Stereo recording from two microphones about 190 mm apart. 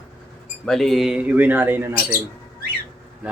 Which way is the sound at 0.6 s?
Centre (ahead or behind).